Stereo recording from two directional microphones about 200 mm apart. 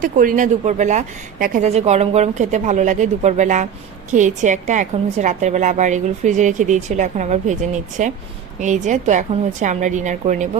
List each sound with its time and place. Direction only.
0.0 s a woman's voice: 45° right (ahead or behind)